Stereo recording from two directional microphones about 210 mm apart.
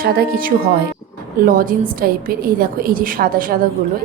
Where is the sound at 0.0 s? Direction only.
45° right (ahead or behind).